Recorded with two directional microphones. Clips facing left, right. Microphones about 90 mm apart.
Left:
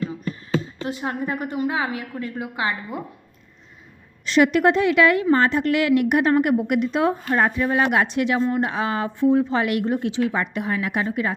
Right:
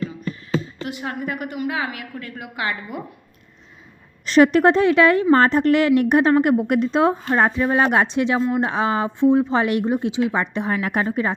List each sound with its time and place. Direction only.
0.9 s a woman's voice: 30° left (ahead or behind)
4.3 s a woman's voice: 35° right (ahead or behind)
8.4 s speech: 5° right (ahead or behind)
8.6 s a woman's voice: 25° right (ahead or behind)